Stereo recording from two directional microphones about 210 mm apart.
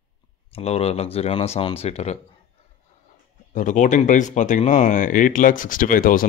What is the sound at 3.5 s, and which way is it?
Speech, 40° left (ahead or behind).